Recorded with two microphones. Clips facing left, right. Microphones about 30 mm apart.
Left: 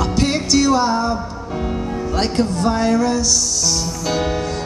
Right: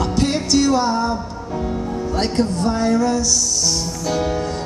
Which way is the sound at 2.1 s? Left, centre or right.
Left.